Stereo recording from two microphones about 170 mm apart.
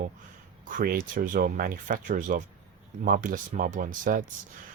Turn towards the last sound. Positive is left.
turn(degrees=-50)  # may be behind; listen again after turning